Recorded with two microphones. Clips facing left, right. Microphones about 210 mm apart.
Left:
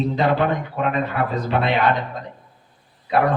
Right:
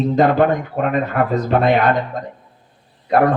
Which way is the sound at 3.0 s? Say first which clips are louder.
Right 4 dB; 45° right (ahead or behind).